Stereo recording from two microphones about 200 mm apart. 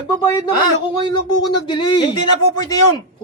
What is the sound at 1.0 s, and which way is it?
A man's voice, 20° left (ahead or behind).